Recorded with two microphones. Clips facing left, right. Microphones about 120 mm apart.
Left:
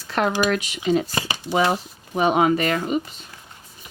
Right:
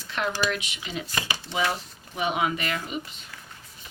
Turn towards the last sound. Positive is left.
turn(degrees=40)  # may be behind; listen again after turning